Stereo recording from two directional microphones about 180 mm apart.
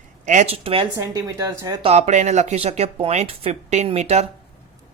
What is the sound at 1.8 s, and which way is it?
Speech, 35° right (ahead or behind).